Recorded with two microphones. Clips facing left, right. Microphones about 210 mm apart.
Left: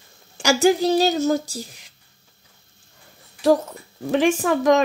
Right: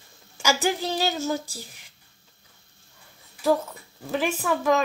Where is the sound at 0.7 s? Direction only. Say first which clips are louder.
Left 8 dB; 40° left (ahead or behind).